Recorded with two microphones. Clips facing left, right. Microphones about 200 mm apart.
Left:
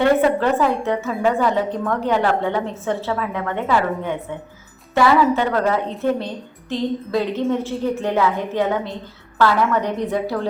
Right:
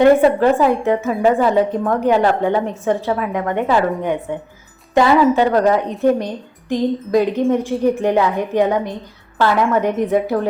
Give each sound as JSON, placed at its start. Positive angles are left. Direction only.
{"t": 0.9, "sound": "a woman's voice", "side_deg": -20}